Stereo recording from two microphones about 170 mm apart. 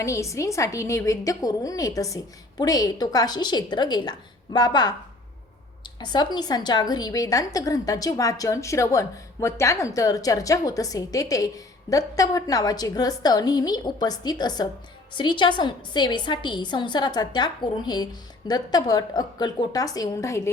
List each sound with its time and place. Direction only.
0.0 s a woman's voice: 20° left (ahead or behind)